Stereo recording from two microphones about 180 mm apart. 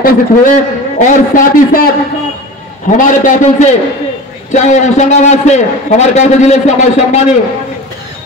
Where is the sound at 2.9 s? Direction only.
45° left (ahead or behind).